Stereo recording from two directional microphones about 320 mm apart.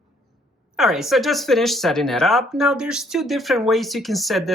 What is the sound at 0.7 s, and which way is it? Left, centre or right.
Speech, centre.